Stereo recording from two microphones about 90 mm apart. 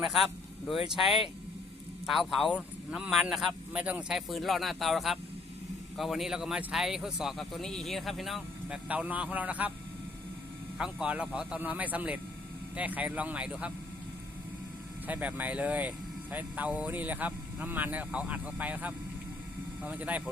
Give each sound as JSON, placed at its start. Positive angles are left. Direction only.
{"t": 0.0, "sound": "speech", "side_deg": 0}
{"t": 3.7, "sound": "speech", "side_deg": -15}
{"t": 4.1, "sound": "speech", "side_deg": 0}
{"t": 8.9, "sound": "speech", "side_deg": -15}
{"t": 10.8, "sound": "speech", "side_deg": -10}
{"t": 15.0, "sound": "speech", "side_deg": -15}